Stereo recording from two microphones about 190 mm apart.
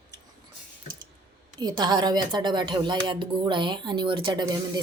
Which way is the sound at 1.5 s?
20° right (ahead or behind).